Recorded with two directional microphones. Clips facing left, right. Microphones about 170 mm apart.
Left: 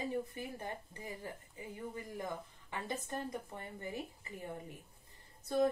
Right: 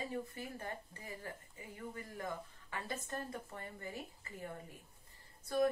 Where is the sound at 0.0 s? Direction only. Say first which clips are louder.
Left 3 dB; 15° left (ahead or behind).